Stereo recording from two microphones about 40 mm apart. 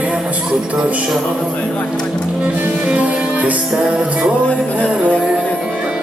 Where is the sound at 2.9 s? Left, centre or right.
Right.